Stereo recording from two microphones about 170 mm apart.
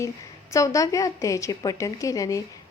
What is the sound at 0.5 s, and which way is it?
A woman's voice, 20° left (ahead or behind).